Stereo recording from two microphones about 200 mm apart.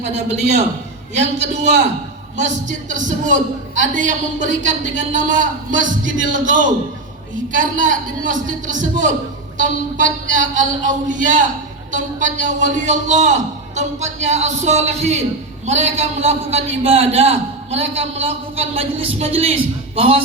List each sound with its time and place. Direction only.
1.1 s a man's voice: 35° right (ahead or behind)